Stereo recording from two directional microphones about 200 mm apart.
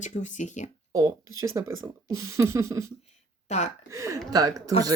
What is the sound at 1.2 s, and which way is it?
Speech, 90° right.